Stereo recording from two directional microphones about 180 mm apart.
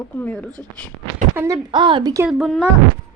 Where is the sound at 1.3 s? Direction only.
15° right (ahead or behind).